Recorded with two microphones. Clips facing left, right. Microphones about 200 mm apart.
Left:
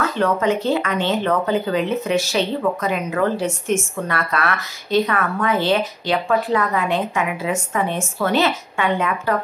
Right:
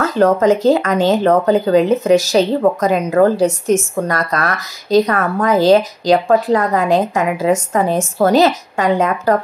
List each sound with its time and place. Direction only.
0.0 s speech: 40° right (ahead or behind)